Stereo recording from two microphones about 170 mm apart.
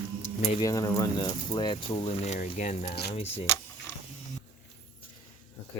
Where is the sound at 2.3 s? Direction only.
50° left (ahead or behind).